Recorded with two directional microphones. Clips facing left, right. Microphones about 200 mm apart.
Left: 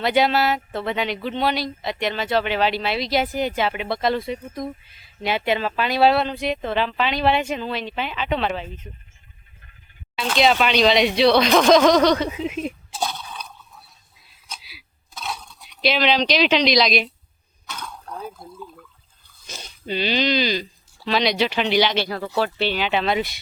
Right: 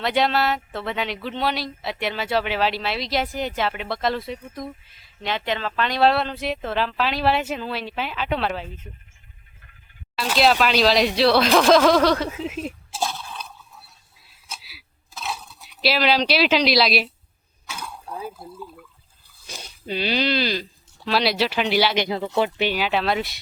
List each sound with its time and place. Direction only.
0.0 s speech: centre (ahead or behind)
5.3 s speech: 10° left (ahead or behind); by 8.9 s 5° right (ahead or behind)
10.2 s speech: centre (ahead or behind)
14.4 s a sound: 5° right (ahead or behind)
17.7 s water: 10° right (ahead or behind)
19.5 s speech: centre (ahead or behind)
22.0 s speech: 20° right (ahead or behind); by 23.4 s centre (ahead or behind)